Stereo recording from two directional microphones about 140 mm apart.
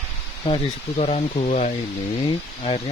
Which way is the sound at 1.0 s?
50° left (ahead or behind).